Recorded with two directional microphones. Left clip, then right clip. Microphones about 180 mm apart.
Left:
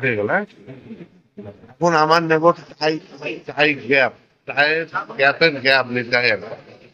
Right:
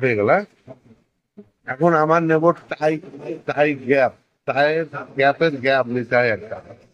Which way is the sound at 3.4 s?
50° right (ahead or behind).